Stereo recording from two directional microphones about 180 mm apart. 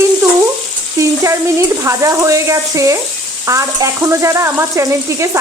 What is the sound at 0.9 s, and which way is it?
Frying, 15° right (ahead or behind).